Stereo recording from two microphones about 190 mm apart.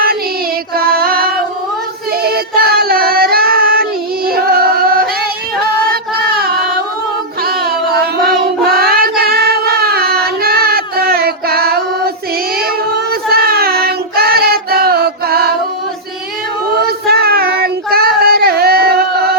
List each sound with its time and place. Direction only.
0.8 s music: 55° right (ahead or behind)
2.2 s child singing: 55° right (ahead or behind)
4.3 s music: 55° right (ahead or behind)
7.4 s child singing: 55° right (ahead or behind)
16.7 s child singing: 55° right (ahead or behind)